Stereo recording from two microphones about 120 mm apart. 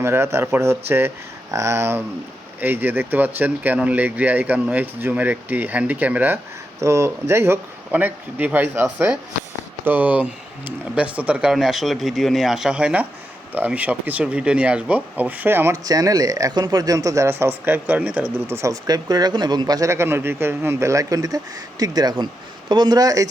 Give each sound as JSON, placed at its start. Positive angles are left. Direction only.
{"t": 0.0, "sound": "speech", "side_deg": -20}
{"t": 15.9, "sound": "speech", "side_deg": -30}